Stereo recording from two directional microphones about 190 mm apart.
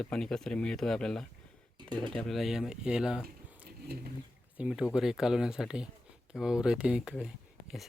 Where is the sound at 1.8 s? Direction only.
25° right (ahead or behind).